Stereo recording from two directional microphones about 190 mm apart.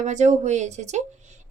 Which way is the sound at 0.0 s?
40° right (ahead or behind).